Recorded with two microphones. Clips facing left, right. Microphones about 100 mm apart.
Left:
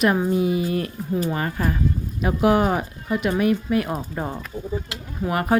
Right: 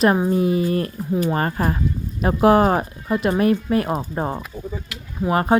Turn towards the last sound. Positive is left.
turn(degrees=-30)  # may be behind; listen again after turning